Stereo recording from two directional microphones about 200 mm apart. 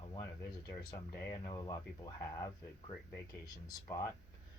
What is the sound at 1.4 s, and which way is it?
Speech, 20° left (ahead or behind).